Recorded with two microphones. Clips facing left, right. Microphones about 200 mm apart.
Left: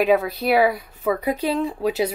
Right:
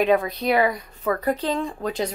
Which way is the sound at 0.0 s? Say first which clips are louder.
Left 1 dB; 5° left (ahead or behind).